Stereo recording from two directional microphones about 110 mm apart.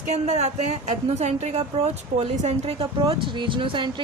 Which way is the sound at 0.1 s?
90° right.